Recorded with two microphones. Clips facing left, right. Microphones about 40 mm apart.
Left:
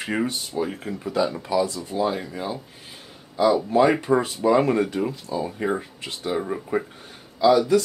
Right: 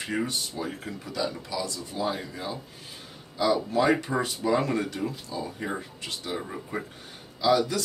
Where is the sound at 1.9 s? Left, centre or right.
Centre.